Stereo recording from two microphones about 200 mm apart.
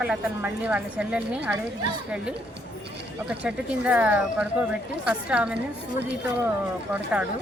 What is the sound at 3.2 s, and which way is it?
Speech, 5° right (ahead or behind).